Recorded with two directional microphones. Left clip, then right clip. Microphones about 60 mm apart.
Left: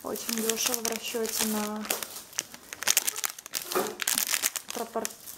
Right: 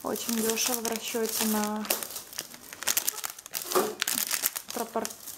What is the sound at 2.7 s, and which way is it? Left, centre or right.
Crumpling, centre.